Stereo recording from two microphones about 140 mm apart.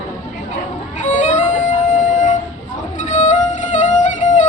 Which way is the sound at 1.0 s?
60° left (ahead or behind).